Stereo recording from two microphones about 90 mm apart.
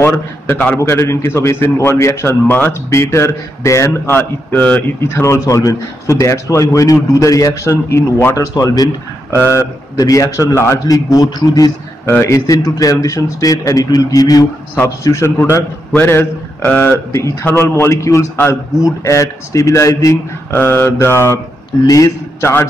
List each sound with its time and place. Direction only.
0.0 s a man's voice: 20° left (ahead or behind)
2.4 s a man's voice: 20° left (ahead or behind)
2.9 s a man's voice: 30° left (ahead or behind)
9.3 s a man's voice: 30° left (ahead or behind)
10.9 s a man's voice: 40° left (ahead or behind)
12.1 s a man's voice: 25° left (ahead or behind)
12.4 s a man's voice: 40° left (ahead or behind)
15.0 s a man's voice: 30° left (ahead or behind)
20.5 s a man's voice: 25° left (ahead or behind)
21.8 s a man's voice: 40° left (ahead or behind)